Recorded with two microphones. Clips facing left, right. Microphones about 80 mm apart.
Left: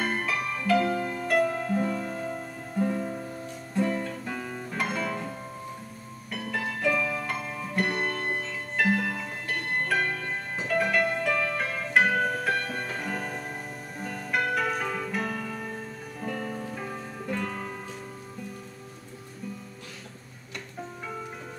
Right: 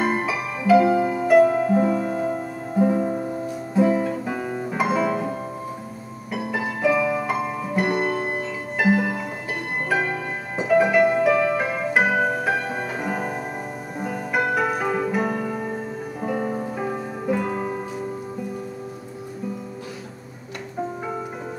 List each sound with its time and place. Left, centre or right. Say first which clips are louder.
0.0 s music: right 6 dB; centre
3.1 s music: right 9 dB; right
3.4 s music: right 8 dB; centre
4.7 s music: right 9 dB; centre